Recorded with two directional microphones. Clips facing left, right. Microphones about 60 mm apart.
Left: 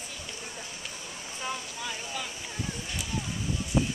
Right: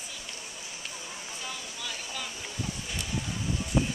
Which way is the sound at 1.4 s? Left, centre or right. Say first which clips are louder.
Left 6 dB; left.